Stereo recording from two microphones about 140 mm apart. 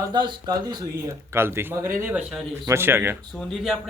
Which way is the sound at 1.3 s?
15° right (ahead or behind).